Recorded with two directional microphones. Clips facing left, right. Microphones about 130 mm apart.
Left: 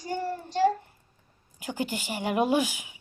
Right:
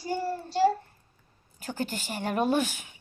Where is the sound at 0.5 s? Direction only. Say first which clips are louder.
Even; 10° right (ahead or behind).